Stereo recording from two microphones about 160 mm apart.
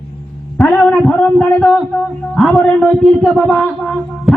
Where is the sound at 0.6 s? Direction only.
5° left (ahead or behind).